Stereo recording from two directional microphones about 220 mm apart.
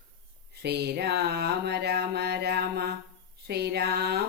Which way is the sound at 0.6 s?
50° right (ahead or behind).